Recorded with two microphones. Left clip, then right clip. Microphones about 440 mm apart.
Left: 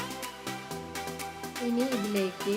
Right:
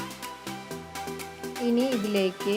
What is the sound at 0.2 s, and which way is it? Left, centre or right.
Music, centre.